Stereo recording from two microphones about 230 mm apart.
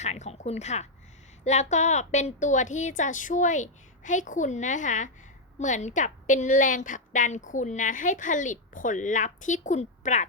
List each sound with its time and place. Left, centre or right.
0.0 s a woman's voice: left